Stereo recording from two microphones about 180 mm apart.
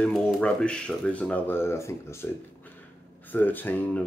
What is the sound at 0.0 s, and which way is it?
Speech, 5° left (ahead or behind).